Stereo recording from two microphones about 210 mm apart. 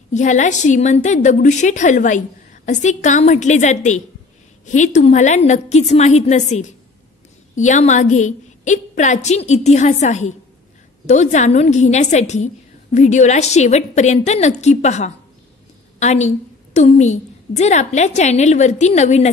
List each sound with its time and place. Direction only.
0.1 s a woman's voice: 35° left (ahead or behind)